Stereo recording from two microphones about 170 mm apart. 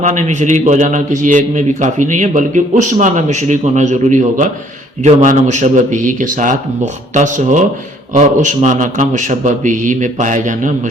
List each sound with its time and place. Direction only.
0.0 s a man's voice: 45° right (ahead or behind)